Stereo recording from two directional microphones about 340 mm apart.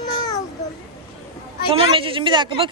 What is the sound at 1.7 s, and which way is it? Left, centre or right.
Speech, centre.